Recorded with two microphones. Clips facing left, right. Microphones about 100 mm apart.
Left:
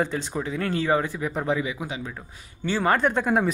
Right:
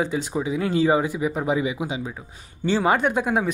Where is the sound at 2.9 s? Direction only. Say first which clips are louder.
Right 1 dB; 5° right (ahead or behind).